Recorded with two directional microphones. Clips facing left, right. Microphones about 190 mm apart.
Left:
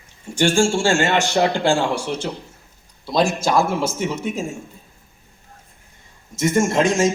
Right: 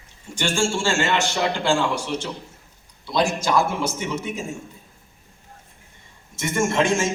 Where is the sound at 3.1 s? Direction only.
45° left (ahead or behind).